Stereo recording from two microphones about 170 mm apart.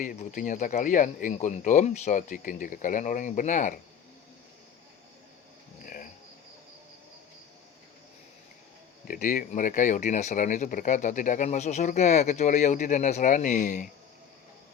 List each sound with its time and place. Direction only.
0.0 s speech: 50° left (ahead or behind)
5.8 s insect: 55° left (ahead or behind)
9.0 s speech: 50° left (ahead or behind)